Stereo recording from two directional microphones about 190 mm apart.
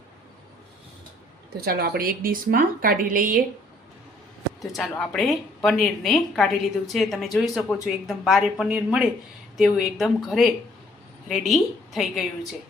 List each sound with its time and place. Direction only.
1.6 s a woman's voice: 55° right (ahead or behind)
4.6 s a woman's voice: centre (ahead or behind)